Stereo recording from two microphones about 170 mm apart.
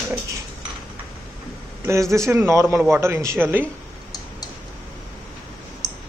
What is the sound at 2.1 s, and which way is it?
A man's voice, 15° right (ahead or behind).